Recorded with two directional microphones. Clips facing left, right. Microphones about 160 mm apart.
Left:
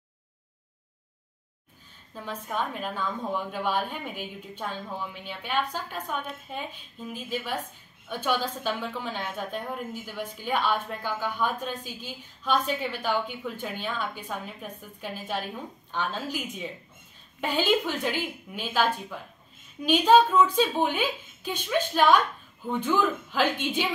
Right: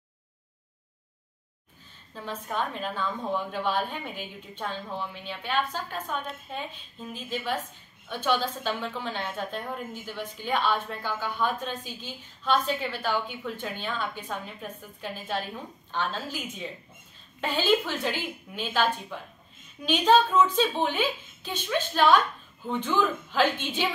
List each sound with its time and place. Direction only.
2.1 s a woman's voice: 10° left (ahead or behind)